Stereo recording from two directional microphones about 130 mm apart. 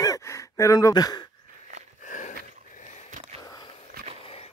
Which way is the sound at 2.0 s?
75° left (ahead or behind).